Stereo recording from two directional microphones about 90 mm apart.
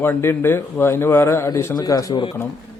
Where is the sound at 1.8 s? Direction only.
45° left (ahead or behind).